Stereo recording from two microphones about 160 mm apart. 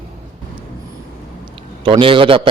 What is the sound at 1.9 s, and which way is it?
Speech, 30° right (ahead or behind).